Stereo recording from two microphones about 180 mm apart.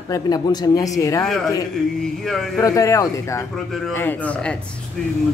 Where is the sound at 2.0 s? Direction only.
Centre (ahead or behind).